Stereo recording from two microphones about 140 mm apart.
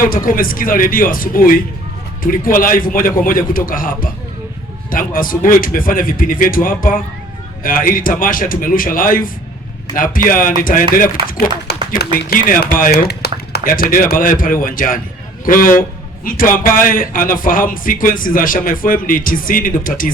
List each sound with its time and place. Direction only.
0.0 s a man's voice: 90° left
11.9 s a man's voice: 85° left